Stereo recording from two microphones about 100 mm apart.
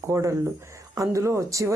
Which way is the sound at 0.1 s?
30° right (ahead or behind).